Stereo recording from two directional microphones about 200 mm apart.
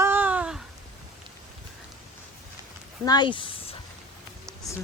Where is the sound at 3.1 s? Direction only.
25° left (ahead or behind).